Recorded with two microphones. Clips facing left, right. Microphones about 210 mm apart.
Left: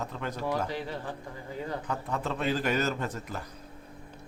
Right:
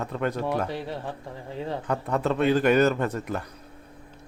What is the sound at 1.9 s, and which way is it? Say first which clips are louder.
A man's voice: right 10 dB; 60° right (ahead or behind).